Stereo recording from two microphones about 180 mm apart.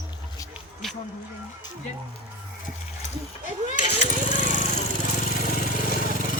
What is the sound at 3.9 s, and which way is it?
Vehicle, 45° left (ahead or behind).